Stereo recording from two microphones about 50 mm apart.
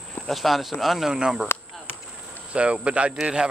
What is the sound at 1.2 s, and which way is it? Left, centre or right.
Speech, centre.